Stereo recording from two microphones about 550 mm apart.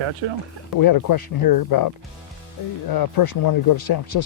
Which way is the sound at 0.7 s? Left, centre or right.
Left.